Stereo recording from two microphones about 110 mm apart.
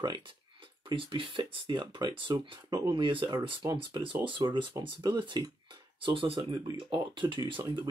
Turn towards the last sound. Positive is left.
turn(degrees=-45)  # may be behind; listen again after turning